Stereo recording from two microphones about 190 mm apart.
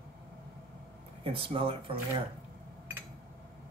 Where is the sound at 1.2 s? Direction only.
30° right (ahead or behind).